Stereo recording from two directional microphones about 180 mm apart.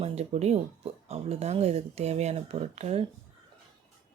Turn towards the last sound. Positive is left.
turn(degrees=-35)  # may be behind; listen again after turning